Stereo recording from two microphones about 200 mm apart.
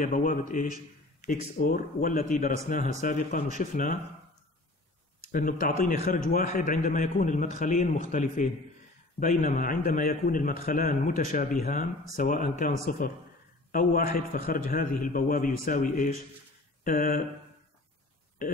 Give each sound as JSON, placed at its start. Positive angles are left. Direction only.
{"t": 0.0, "sound": "a man's voice", "side_deg": 40}
{"t": 5.3, "sound": "a man's voice", "side_deg": 45}